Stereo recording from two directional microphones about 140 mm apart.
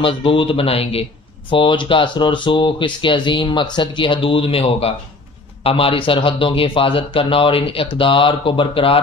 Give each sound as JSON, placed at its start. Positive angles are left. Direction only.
{"t": 0.0, "sound": "speech", "side_deg": 40}